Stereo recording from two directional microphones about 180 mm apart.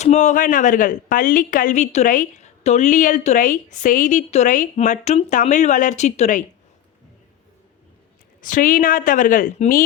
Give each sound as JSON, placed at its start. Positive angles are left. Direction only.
{"t": 0.0, "sound": "speech", "side_deg": 40}
{"t": 8.4, "sound": "speech", "side_deg": 50}